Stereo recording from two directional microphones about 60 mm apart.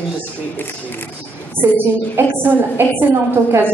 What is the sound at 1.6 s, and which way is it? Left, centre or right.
A woman's voice, right.